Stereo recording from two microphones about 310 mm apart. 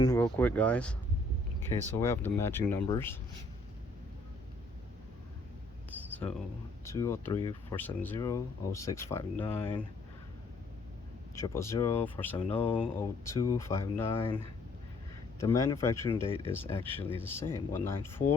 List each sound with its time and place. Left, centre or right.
0.0 s speech: centre
5.9 s a sound: centre
6.8 s speech: centre
11.3 s speech: centre
15.4 s speech: centre